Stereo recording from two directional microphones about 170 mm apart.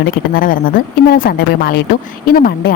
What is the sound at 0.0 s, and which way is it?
A woman's voice, 60° left (ahead or behind).